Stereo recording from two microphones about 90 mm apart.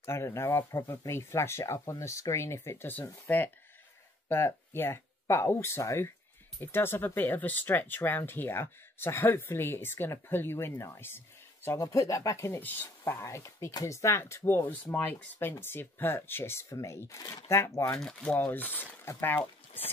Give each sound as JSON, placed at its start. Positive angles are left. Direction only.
{"t": 0.0, "sound": "speech", "side_deg": 30}
{"t": 17.9, "sound": "speech", "side_deg": 10}